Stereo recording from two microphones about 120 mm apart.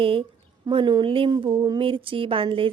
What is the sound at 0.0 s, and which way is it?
A woman's voice, 50° right (ahead or behind).